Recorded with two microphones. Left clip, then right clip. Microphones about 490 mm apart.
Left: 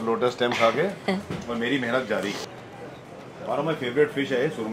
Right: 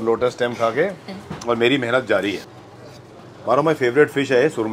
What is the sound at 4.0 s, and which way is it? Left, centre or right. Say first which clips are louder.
Speech: right 6 dB; right.